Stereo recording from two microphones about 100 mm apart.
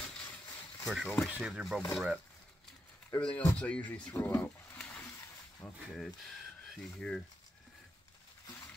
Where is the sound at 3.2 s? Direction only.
15° left (ahead or behind).